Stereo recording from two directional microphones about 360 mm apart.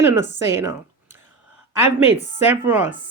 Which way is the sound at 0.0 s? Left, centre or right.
Centre.